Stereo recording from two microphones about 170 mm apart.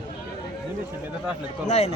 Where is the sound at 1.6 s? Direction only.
40° left (ahead or behind).